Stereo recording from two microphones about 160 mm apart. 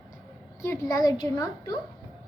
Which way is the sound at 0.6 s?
20° left (ahead or behind).